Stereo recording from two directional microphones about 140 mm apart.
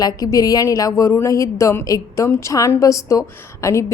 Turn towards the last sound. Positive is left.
turn(degrees=20)  # may be behind; listen again after turning